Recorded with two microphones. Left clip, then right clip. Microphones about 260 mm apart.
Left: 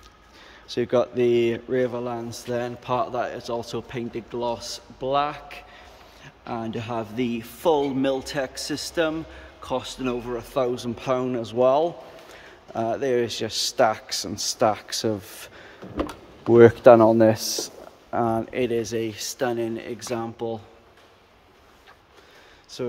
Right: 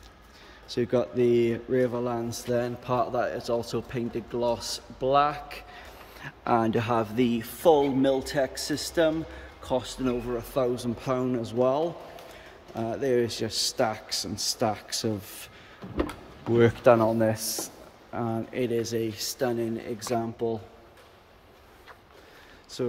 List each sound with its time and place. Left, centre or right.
0.7 s speech: centre
6.2 s speech: centre
16.0 s speech: left
18.5 s speech: centre